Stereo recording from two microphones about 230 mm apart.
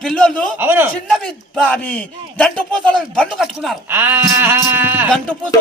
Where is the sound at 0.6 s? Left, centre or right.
Centre.